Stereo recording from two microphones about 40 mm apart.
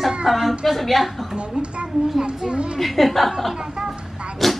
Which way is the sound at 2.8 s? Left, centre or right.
Centre.